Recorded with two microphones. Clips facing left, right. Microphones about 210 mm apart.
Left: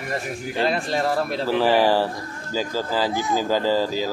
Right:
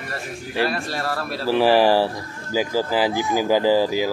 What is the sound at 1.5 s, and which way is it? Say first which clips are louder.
Speech: right 3 dB; 10° right (ahead or behind).